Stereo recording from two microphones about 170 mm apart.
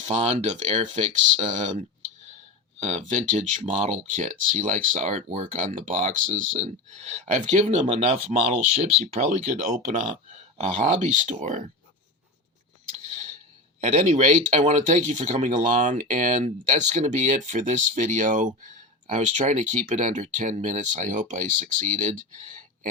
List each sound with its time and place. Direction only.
0.0 s speech: 40° right (ahead or behind)
2.8 s speech: 45° right (ahead or behind)
13.8 s speech: 40° right (ahead or behind)